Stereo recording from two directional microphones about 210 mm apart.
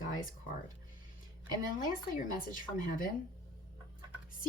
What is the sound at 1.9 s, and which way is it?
Speech, 40° left (ahead or behind).